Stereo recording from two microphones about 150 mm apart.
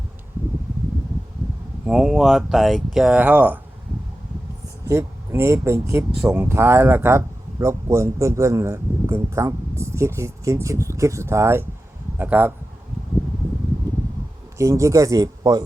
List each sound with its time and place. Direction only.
1.8 s speech: 5° right (ahead or behind)
4.9 s speech: 20° right (ahead or behind)
14.6 s speech: 20° right (ahead or behind)